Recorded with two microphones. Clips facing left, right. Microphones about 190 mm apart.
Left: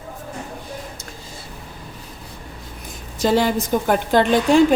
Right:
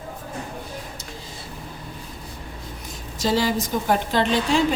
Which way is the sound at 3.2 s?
55° left (ahead or behind).